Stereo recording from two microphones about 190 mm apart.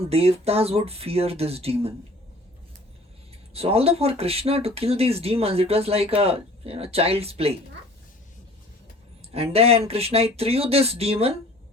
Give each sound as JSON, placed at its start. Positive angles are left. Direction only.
{"t": 0.1, "sound": "speech", "side_deg": -30}
{"t": 3.5, "sound": "speech", "side_deg": -30}
{"t": 9.3, "sound": "speech", "side_deg": -30}